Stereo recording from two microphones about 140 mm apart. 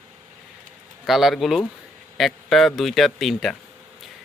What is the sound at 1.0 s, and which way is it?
Speech, centre (ahead or behind).